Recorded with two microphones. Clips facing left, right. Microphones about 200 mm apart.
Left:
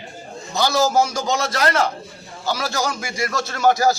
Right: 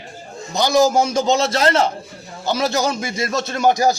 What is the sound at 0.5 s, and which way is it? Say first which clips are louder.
A man's voice: right 3 dB; 15° right (ahead or behind).